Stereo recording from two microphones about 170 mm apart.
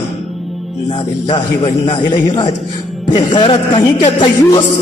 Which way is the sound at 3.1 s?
30° left (ahead or behind).